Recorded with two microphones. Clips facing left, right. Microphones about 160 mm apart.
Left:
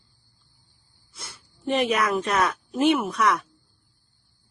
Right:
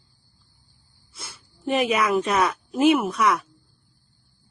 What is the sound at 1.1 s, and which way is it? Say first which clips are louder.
Speech: right 1 dB; centre (ahead or behind).